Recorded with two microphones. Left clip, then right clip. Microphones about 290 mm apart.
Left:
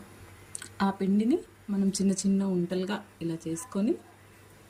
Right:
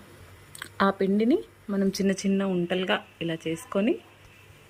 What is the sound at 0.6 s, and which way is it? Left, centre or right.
Speech, centre.